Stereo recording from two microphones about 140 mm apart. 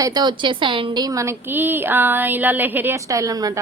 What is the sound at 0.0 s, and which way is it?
A woman's voice, 30° right (ahead or behind).